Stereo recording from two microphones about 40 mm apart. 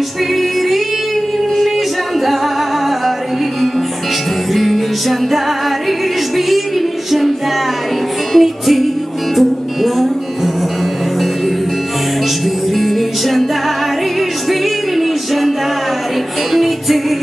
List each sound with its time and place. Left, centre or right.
4.6 s music: centre
7.1 s music: centre
12.7 s music: centre
14.5 s music: centre
16.5 s music: centre